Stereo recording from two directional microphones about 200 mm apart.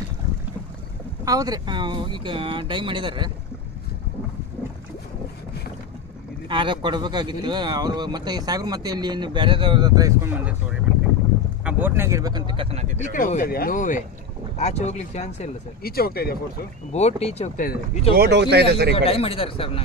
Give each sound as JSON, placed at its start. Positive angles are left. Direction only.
{"t": 1.2, "sound": "speech", "side_deg": -20}
{"t": 6.5, "sound": "speech", "side_deg": -25}
{"t": 13.0, "sound": "speech", "side_deg": 40}
{"t": 15.8, "sound": "speech", "side_deg": 50}
{"t": 16.9, "sound": "speech", "side_deg": 30}
{"t": 17.6, "sound": "speech", "side_deg": 45}
{"t": 18.1, "sound": "speech", "side_deg": -55}
{"t": 18.9, "sound": "a man's voice", "side_deg": 30}